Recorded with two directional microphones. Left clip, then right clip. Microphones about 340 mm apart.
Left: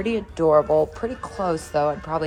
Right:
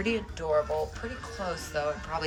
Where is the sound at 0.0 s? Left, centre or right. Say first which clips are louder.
Left 6 dB; centre.